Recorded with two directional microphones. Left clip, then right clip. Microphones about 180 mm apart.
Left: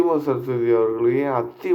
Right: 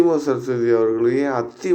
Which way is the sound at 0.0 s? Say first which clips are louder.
Right 2 dB; 25° right (ahead or behind).